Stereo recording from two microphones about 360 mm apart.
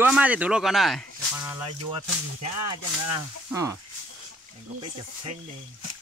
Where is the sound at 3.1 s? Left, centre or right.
Centre.